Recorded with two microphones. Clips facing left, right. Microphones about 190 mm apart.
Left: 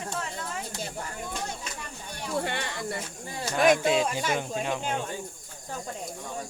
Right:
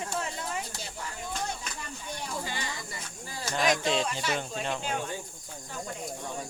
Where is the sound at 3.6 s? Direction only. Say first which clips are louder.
Left 5 dB; 55° left (ahead or behind).